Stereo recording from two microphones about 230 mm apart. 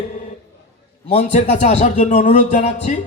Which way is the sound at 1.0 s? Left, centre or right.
Left.